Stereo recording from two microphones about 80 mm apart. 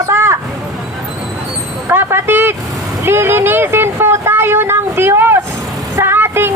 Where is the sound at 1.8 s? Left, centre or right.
Right.